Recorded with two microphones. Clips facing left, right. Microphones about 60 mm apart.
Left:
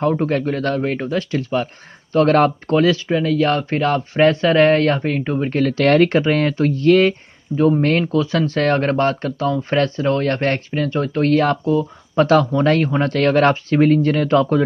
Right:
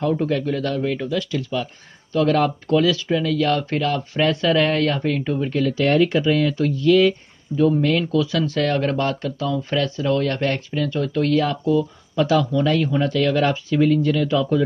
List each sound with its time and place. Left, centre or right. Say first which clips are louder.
0.0 s speech: left 3 dB; left
5.8 s speech: left 4 dB; left